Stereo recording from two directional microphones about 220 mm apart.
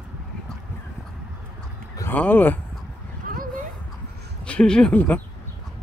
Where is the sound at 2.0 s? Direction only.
10° left (ahead or behind).